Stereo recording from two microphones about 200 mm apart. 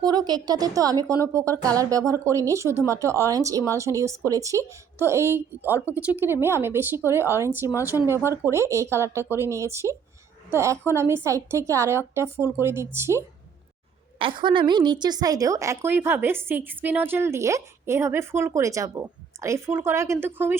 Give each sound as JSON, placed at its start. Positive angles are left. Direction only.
{"t": 0.0, "sound": "a woman's voice", "side_deg": -20}
{"t": 14.2, "sound": "a woman's voice", "side_deg": -25}